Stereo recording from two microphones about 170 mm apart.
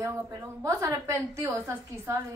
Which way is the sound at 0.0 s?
15° right (ahead or behind).